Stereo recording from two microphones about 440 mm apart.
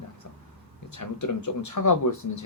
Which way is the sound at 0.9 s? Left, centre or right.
Left.